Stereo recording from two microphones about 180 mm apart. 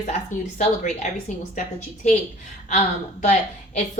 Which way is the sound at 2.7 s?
40° left (ahead or behind).